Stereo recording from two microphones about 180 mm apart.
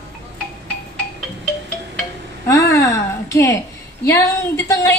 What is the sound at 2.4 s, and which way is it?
A woman's voice, 15° left (ahead or behind).